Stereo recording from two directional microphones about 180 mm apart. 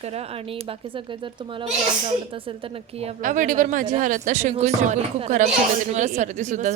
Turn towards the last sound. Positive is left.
turn(degrees=-45)  # may be behind; listen again after turning